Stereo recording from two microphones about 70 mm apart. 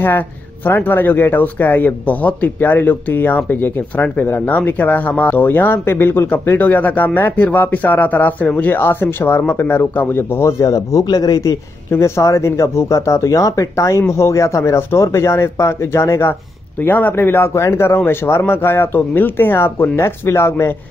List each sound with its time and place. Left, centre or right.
0.0 s speech: left
10.6 s speech: left
11.9 s speech: left
16.7 s speech: left